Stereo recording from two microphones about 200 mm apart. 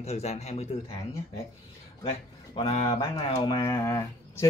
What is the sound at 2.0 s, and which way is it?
Speech, 30° left (ahead or behind).